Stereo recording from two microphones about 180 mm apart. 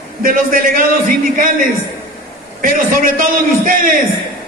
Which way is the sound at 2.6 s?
50° right (ahead or behind).